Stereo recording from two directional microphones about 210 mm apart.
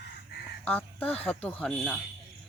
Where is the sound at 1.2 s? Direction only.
5° left (ahead or behind).